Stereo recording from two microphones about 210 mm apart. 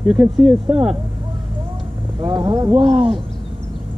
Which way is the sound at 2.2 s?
20° right (ahead or behind).